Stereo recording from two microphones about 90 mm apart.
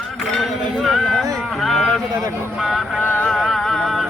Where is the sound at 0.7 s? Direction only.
Centre (ahead or behind).